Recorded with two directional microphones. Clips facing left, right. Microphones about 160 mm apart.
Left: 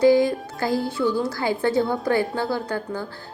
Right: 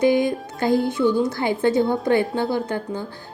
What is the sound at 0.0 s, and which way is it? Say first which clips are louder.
Music: left 2 dB; 20° right (ahead or behind).